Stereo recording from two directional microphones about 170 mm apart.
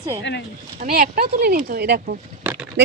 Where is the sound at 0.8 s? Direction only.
55° right (ahead or behind); by 2.1 s 70° right (ahead or behind).